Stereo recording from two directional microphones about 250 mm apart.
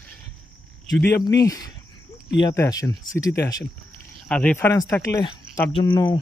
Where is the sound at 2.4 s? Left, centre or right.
Centre.